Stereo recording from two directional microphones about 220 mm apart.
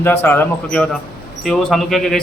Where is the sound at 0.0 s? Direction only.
10° left (ahead or behind).